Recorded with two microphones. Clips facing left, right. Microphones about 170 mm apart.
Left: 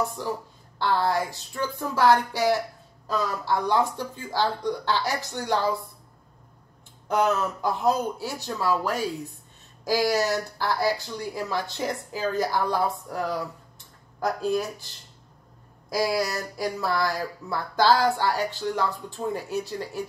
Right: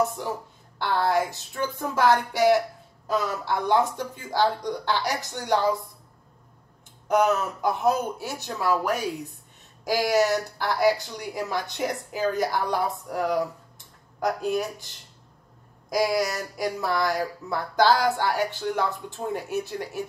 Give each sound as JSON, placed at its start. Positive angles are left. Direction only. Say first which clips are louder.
{"t": 0.8, "sound": "speech", "louder": "right 1 dB", "side_deg": -20}
{"t": 7.1, "sound": "speech", "louder": "right 2 dB", "side_deg": -20}
{"t": 15.9, "sound": "speech", "louder": "right 1 dB", "side_deg": -20}